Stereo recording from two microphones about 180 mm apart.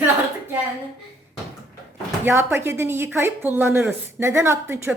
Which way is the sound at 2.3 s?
10° right (ahead or behind).